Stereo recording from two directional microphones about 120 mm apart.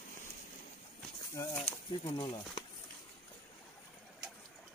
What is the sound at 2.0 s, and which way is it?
Speech, 45° left (ahead or behind).